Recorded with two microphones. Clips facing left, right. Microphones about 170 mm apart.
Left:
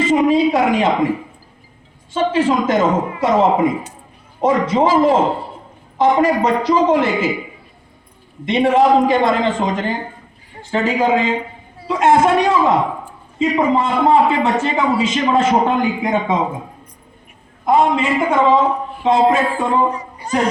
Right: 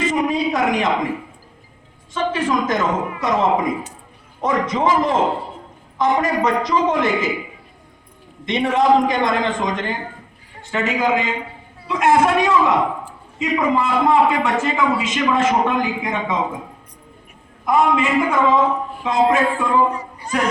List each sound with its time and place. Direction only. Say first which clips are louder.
0.0 s a sound: left 6 dB; 30° left (ahead or behind)
2.1 s a man's voice: left 4 dB; 30° left (ahead or behind)
8.4 s a man's voice: left 3 dB; 30° left (ahead or behind)
17.7 s a man's voice: left 2 dB; 30° left (ahead or behind)